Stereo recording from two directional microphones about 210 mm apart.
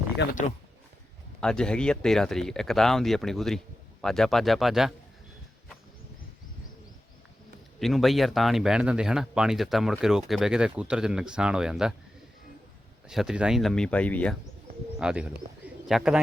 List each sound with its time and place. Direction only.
1.4 s speech: 5° left (ahead or behind)
7.8 s speech: centre (ahead or behind)
13.1 s speech: centre (ahead or behind)
14.9 s speech: 5° right (ahead or behind)
15.6 s bird: centre (ahead or behind)